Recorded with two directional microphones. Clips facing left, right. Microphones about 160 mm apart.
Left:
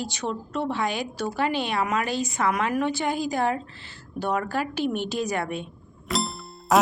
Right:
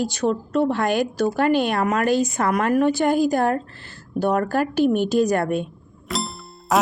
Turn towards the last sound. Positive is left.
turn(degrees=0)  # may be behind; listen again after turning